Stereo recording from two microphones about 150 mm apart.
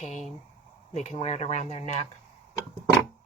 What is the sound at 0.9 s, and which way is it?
Speech, 45° left (ahead or behind).